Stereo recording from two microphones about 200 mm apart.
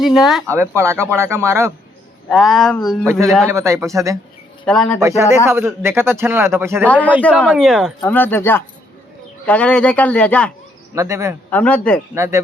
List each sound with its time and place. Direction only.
0.0 s speech: centre (ahead or behind)
0.4 s a man's voice: 10° right (ahead or behind)
2.3 s speech: centre (ahead or behind)
3.5 s a man's voice: 15° right (ahead or behind)
4.6 s speech: 5° left (ahead or behind)
4.9 s a man's voice: 15° right (ahead or behind)
6.8 s a man's voice: 5° left (ahead or behind)
8.0 s a man's voice: 10° left (ahead or behind)
10.9 s a man's voice: 15° right (ahead or behind)
11.5 s speech: 5° left (ahead or behind)
12.1 s a man's voice: 15° right (ahead or behind)